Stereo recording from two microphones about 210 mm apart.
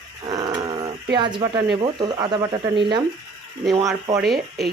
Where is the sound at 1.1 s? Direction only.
20° right (ahead or behind).